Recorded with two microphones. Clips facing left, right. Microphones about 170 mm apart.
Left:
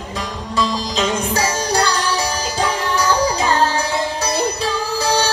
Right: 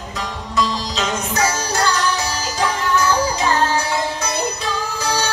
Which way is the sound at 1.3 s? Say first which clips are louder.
Right 1 dB; 35° left (ahead or behind).